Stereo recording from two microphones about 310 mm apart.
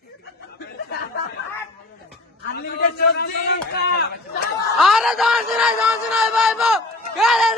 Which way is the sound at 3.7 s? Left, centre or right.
Left.